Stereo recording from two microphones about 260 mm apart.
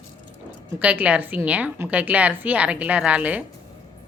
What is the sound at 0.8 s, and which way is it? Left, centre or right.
A woman's voice, centre.